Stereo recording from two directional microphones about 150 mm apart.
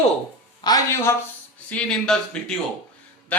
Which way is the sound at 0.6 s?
25° left (ahead or behind).